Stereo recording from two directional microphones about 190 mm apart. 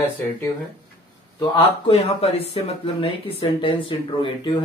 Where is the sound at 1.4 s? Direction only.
30° left (ahead or behind).